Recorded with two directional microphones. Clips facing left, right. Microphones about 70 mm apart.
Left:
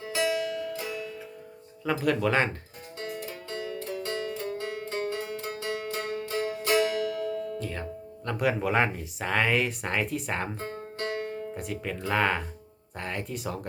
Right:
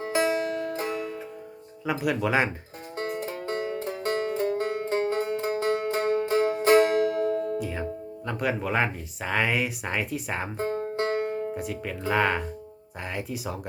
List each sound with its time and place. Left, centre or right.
0.0 s music: right
1.8 s speech: centre
3.0 s music: right
7.6 s speech: centre
10.6 s music: right
11.5 s speech: centre